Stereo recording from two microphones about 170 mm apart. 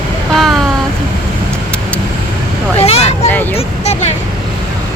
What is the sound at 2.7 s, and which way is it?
Vehicle, 35° left (ahead or behind).